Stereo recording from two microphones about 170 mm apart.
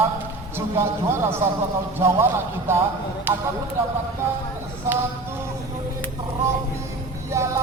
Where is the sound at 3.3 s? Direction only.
10° right (ahead or behind).